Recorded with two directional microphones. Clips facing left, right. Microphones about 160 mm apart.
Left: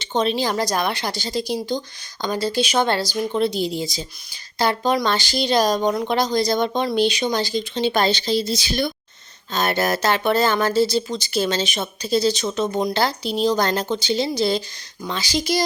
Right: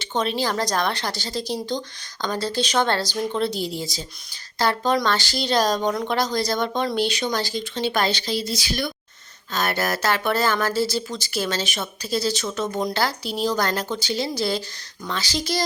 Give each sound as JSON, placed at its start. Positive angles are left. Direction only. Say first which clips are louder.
{"t": 0.0, "sound": "speech", "louder": "left 3 dB", "side_deg": 20}